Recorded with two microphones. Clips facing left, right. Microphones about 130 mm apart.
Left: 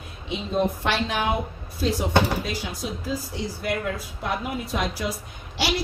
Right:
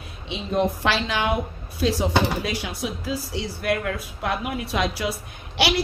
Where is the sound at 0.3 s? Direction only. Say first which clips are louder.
Right 1 dB; 85° right.